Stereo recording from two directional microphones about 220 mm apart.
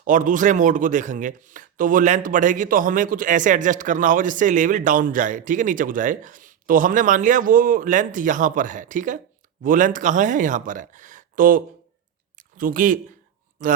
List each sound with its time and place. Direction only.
0.0 s speech: 35° right (ahead or behind)